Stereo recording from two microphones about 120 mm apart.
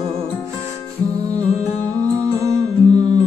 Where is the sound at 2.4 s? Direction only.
30° right (ahead or behind).